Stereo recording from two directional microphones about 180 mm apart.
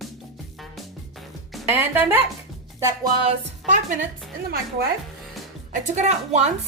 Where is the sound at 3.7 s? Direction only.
45° right (ahead or behind).